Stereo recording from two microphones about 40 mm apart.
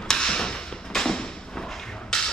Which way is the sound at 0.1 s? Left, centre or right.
Centre.